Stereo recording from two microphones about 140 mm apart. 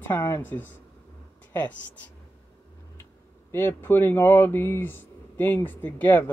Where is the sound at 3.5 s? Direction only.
15° left (ahead or behind).